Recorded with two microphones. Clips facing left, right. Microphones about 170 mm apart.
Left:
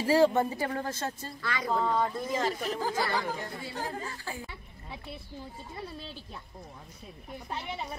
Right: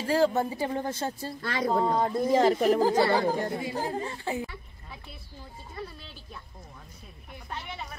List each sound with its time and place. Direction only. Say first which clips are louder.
0.0 s speech: left 1 dB; 5° left (ahead or behind)
0.3 s speech: right 1 dB; 10° right (ahead or behind)
0.8 s speech: right 3 dB; 30° right (ahead or behind)
2.3 s speech: right 13 dB; 50° right (ahead or behind)
3.0 s a woman's voice: right 8 dB; 30° right (ahead or behind)